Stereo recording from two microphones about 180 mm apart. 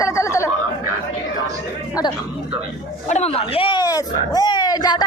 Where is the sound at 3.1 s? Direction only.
35° left (ahead or behind).